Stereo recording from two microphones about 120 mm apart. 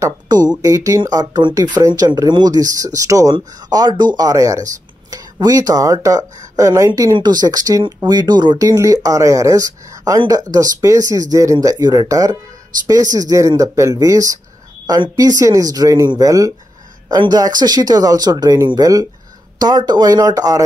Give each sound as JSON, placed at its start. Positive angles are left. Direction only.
{"t": 0.0, "sound": "speech", "side_deg": -35}